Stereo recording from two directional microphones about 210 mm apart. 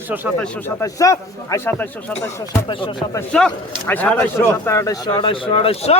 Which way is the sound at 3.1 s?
5° left (ahead or behind).